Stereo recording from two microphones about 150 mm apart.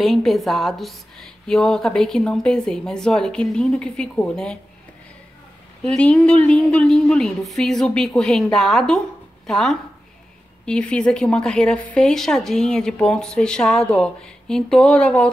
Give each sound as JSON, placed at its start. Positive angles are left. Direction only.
{"t": 0.0, "sound": "a woman's voice", "side_deg": 0}
{"t": 5.9, "sound": "a woman's voice", "side_deg": 5}